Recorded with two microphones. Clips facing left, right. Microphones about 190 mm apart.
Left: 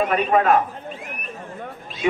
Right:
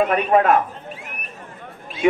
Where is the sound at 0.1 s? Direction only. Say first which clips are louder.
Right 1 dB; 50° right (ahead or behind).